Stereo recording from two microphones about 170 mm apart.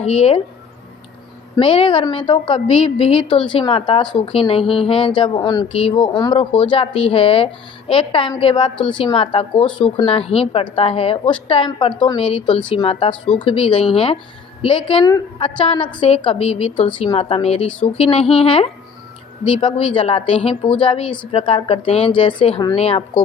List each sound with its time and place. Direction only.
0.0 s a woman's voice: 35° left (ahead or behind)
1.5 s a woman's voice: 30° left (ahead or behind)